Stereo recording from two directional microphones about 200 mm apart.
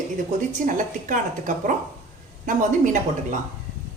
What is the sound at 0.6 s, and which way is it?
A woman's voice, 40° right (ahead or behind).